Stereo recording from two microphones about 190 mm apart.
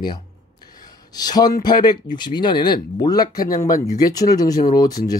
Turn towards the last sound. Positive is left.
turn(degrees=20)  # may be behind; listen again after turning